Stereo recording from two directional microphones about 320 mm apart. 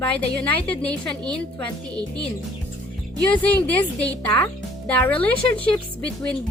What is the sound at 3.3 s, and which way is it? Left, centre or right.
Speech, centre.